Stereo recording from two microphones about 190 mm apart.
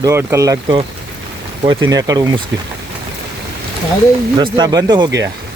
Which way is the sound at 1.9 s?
20° right (ahead or behind).